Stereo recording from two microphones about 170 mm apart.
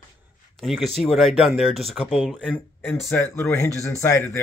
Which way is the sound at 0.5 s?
Centre (ahead or behind).